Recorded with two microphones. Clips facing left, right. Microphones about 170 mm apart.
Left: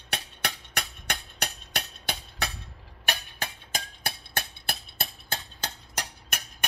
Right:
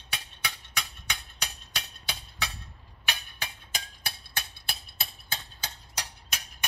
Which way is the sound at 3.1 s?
50° left (ahead or behind).